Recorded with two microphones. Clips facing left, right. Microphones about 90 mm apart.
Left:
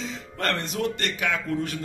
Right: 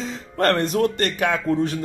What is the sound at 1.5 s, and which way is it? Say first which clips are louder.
Speech: right 7 dB; 30° right (ahead or behind).